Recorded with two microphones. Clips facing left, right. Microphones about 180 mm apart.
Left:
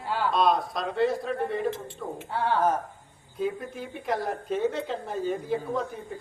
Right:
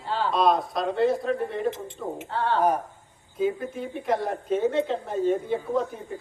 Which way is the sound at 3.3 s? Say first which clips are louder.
Right 4 dB; centre (ahead or behind).